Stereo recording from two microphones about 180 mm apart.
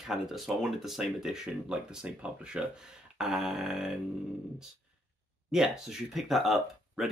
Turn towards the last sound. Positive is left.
turn(degrees=0)  # may be behind; listen again after turning